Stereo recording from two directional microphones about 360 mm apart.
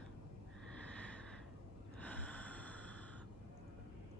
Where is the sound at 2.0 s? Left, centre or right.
Centre.